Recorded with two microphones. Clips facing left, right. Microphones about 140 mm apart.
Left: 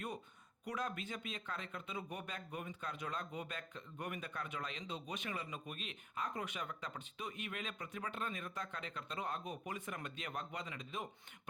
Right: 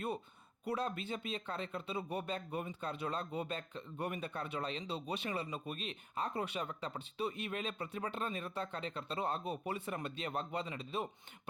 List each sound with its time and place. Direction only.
0.6 s speech: 30° right (ahead or behind)